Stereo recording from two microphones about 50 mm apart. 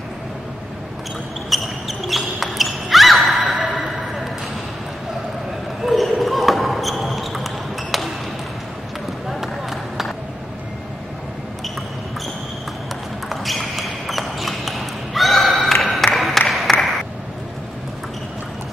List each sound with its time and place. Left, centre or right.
1.5 s basketball bounce: centre
3.5 s a sound: right
5.9 s basketball bounce: centre
9.3 s run: centre
13.3 s a sound: centre
16.2 s music: centre